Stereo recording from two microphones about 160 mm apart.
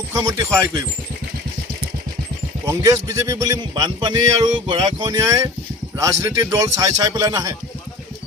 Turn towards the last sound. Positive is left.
turn(degrees=-20)  # may be behind; listen again after turning